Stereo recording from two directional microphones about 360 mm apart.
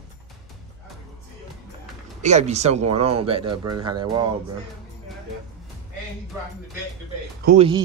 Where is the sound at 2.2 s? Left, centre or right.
Centre.